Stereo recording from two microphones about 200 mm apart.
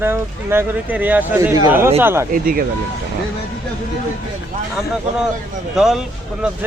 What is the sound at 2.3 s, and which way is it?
Speech, 45° right (ahead or behind).